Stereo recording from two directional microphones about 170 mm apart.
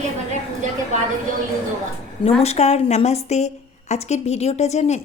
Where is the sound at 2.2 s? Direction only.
35° left (ahead or behind).